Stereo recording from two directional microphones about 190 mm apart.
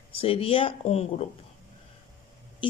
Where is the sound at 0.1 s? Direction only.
30° left (ahead or behind).